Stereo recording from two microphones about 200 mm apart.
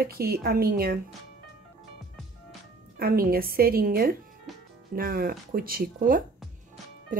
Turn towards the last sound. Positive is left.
turn(degrees=-45)  # may be behind; listen again after turning